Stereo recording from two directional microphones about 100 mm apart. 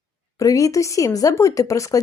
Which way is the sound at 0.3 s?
35° left (ahead or behind).